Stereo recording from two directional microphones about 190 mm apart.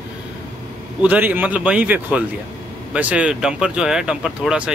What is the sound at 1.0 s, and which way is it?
Speech, 10° right (ahead or behind).